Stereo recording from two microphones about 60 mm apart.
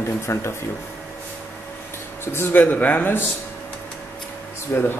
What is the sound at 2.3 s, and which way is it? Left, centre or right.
Speech, left.